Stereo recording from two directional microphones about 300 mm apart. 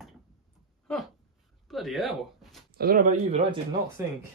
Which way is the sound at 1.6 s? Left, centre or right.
Centre.